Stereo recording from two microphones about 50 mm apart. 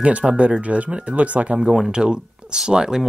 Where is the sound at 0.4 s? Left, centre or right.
Right.